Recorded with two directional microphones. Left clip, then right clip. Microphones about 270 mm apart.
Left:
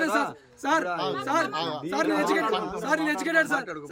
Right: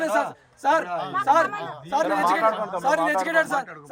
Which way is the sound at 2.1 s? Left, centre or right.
Right.